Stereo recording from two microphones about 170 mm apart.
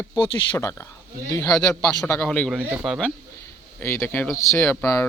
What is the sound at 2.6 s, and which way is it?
Speech, 10° right (ahead or behind).